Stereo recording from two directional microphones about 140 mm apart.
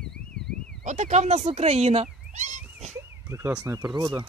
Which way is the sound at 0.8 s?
55° right (ahead or behind).